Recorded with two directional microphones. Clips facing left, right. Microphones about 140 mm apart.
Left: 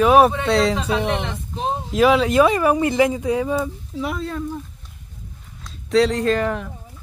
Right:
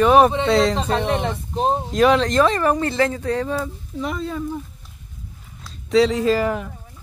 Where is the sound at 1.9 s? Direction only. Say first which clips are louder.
Left 2 dB; 5° left (ahead or behind).